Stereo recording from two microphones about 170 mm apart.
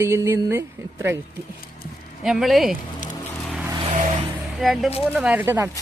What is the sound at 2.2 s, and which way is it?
Speech, centre (ahead or behind).